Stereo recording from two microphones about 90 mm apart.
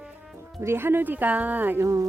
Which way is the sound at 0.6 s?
25° right (ahead or behind).